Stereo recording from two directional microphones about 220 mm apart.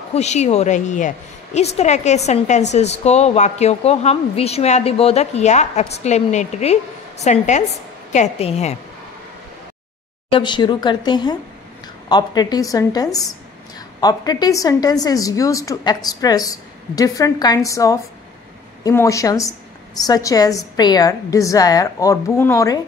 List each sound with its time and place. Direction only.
0.1 s a woman's voice: 30° left (ahead or behind)
10.3 s a woman's voice: 20° left (ahead or behind)